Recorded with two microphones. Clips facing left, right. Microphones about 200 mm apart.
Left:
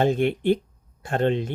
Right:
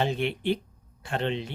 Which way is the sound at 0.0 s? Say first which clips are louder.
Left 6 dB; 50° left (ahead or behind).